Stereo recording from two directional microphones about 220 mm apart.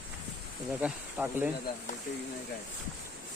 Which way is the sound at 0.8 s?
10° right (ahead or behind).